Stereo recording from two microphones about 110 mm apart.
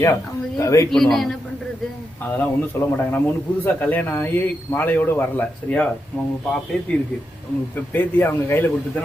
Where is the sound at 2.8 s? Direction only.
25° left (ahead or behind).